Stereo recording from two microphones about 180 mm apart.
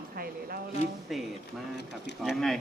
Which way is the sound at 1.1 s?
Centre (ahead or behind).